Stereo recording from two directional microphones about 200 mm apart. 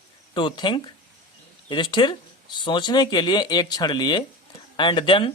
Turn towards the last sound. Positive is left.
turn(degrees=25)  # may be behind; listen again after turning